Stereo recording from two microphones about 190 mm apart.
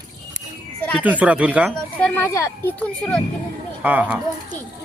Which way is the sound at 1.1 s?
5° right (ahead or behind).